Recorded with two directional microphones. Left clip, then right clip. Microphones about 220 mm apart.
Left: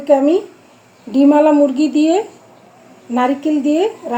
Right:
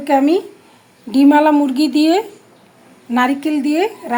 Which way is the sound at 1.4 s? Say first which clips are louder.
Left 2 dB; 35° right (ahead or behind).